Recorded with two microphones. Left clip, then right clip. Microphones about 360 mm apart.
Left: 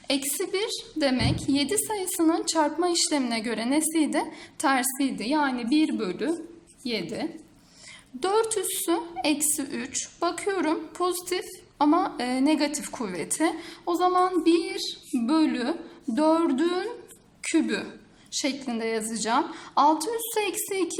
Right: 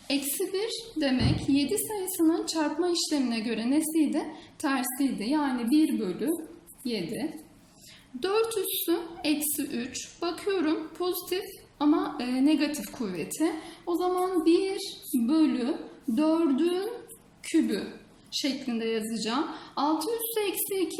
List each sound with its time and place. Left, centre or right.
0.1 s a woman's voice: left